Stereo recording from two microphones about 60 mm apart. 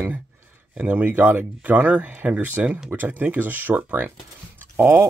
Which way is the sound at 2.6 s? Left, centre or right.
Centre.